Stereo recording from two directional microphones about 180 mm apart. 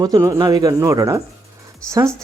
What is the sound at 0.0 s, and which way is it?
Speech, 20° right (ahead or behind).